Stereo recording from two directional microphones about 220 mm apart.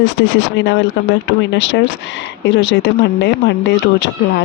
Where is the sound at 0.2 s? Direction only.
55° left (ahead or behind).